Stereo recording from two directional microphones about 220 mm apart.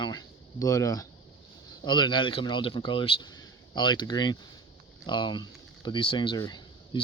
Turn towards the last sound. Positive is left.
turn(degrees=20)  # may be behind; listen again after turning